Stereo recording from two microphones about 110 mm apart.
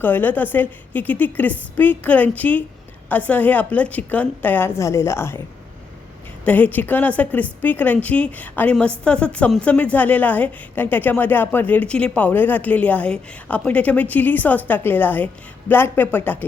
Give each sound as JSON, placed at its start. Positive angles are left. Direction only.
{"t": 0.0, "sound": "a woman's voice", "side_deg": 15}
{"t": 6.4, "sound": "a woman's voice", "side_deg": 15}